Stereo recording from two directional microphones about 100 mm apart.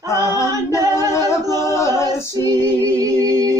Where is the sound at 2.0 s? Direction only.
40° right (ahead or behind).